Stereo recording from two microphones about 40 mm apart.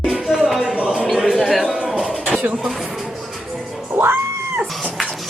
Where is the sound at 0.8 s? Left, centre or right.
Right.